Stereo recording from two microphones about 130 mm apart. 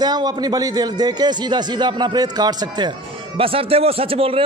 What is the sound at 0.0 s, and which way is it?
A man's voice, 30° right (ahead or behind).